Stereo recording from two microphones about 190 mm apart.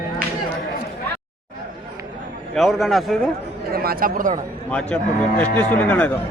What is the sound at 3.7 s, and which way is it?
Speech, 50° right (ahead or behind).